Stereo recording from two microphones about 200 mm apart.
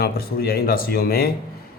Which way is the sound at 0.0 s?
50° left (ahead or behind).